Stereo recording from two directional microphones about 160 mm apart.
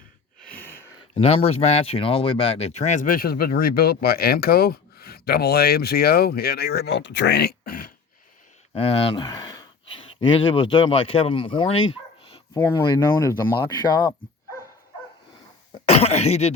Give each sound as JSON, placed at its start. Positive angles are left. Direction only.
{"t": 0.4, "sound": "a sound", "side_deg": 10}
{"t": 1.1, "sound": "speech", "side_deg": 35}
{"t": 8.7, "sound": "a sound", "side_deg": 35}
{"t": 10.0, "sound": "speech", "side_deg": 35}
{"t": 12.5, "sound": "speech", "side_deg": 15}
{"t": 12.8, "sound": "speech", "side_deg": 25}
{"t": 15.9, "sound": "throat clearing", "side_deg": 40}